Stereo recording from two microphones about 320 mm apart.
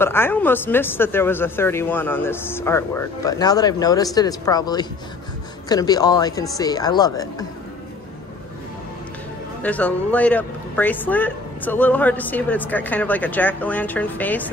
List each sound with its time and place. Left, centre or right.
0.0 s speech: centre
9.6 s a man's voice: centre